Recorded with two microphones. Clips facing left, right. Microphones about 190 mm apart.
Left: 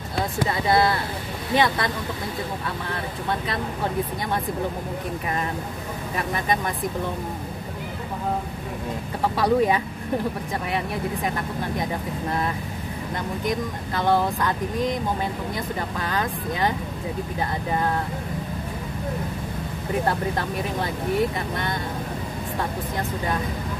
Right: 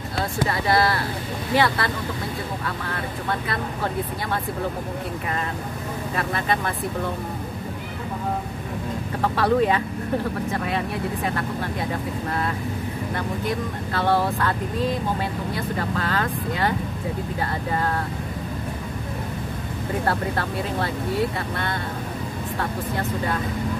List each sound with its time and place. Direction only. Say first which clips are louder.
0.5 s speech: left 1 dB; 20° left (ahead or behind)
6.1 s speech: even; 15° left (ahead or behind)
9.4 s speech: even; 10° left (ahead or behind)
11.2 s speech: right 1 dB; 15° left (ahead or behind)
13.5 s speech: even; 15° left (ahead or behind)
20.1 s speech: even; 15° left (ahead or behind)